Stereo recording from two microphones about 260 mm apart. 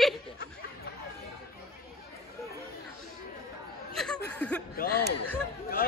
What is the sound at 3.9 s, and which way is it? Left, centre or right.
Chuckle, centre.